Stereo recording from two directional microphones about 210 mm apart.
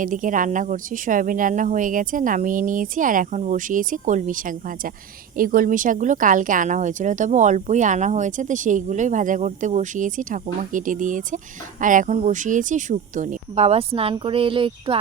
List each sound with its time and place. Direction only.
0.0 s speech: 40° right (ahead or behind)